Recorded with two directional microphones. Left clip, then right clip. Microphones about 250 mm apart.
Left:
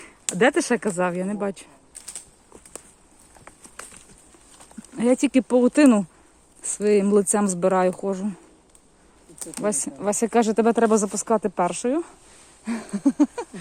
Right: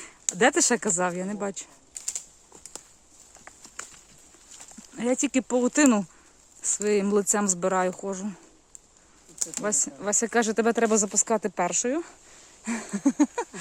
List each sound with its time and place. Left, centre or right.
0.3 s speech: centre
4.9 s speech: centre
9.4 s speech: centre
12.6 s a sound: centre